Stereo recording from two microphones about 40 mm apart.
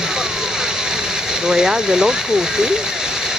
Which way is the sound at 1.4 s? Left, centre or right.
Centre.